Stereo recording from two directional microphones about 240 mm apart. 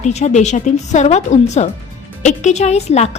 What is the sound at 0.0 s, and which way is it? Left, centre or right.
A woman's voice, left.